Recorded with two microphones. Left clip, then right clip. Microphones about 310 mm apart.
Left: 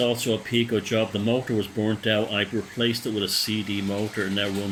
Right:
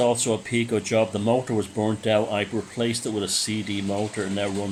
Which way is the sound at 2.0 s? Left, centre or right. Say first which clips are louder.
Right 2 dB; centre.